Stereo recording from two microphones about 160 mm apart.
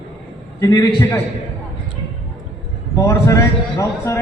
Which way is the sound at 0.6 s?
20° left (ahead or behind).